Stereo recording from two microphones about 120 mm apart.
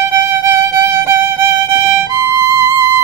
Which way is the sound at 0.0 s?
20° right (ahead or behind).